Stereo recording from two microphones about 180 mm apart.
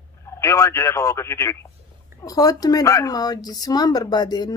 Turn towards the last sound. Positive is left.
turn(degrees=20)  # may be behind; listen again after turning